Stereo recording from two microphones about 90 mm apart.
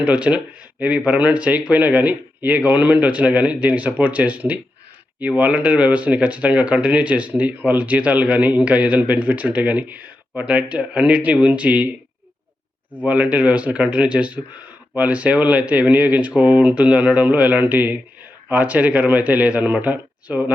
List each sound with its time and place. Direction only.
0.0 s speech: 15° right (ahead or behind)
12.9 s speech: 15° right (ahead or behind)